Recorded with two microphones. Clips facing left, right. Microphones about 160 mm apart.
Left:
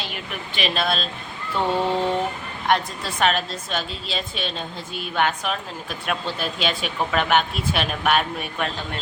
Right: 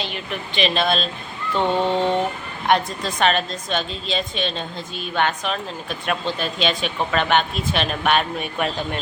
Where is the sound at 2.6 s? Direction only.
5° left (ahead or behind).